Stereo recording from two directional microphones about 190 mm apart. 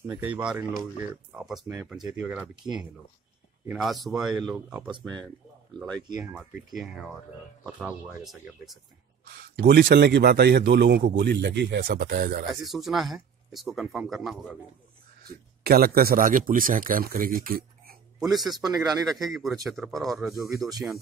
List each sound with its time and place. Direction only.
0.0 s speech: 10° right (ahead or behind)
3.6 s speech: centre (ahead or behind)
5.8 s speech: 5° left (ahead or behind)
6.2 s speech: 10° right (ahead or behind)
9.2 s a man's voice: 55° right (ahead or behind)
11.8 s speech: 50° right (ahead or behind)
12.6 s speech: centre (ahead or behind)
15.2 s speech: 55° right (ahead or behind)
18.2 s speech: centre (ahead or behind)